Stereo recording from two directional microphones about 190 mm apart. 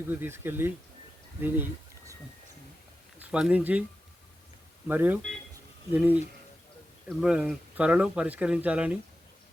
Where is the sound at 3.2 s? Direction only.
5° right (ahead or behind).